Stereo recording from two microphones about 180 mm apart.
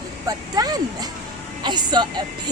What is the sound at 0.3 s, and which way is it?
A woman's voice, 20° right (ahead or behind).